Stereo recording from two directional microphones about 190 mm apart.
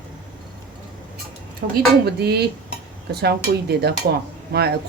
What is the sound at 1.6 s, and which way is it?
Speech, 50° right (ahead or behind).